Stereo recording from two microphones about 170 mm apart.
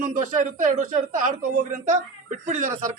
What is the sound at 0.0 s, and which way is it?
A man's voice, 50° right (ahead or behind).